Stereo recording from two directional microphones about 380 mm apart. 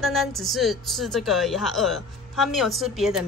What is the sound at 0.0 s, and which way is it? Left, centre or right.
A woman's voice, centre.